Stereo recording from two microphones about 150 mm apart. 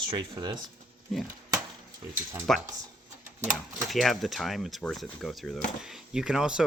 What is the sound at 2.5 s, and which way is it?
Speech, 5° left (ahead or behind).